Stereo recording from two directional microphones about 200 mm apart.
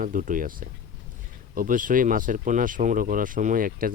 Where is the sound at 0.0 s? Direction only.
40° right (ahead or behind).